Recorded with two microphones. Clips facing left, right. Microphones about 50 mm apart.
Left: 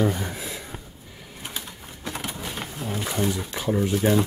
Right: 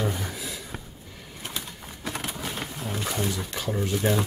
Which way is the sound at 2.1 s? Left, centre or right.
Centre.